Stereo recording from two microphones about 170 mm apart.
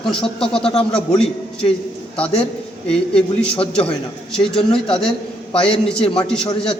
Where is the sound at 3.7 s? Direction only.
5° left (ahead or behind).